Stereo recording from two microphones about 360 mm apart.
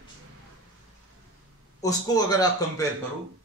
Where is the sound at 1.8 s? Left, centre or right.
Centre.